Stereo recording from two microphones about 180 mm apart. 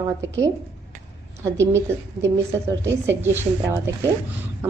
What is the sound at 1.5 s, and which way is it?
Speech, 15° right (ahead or behind).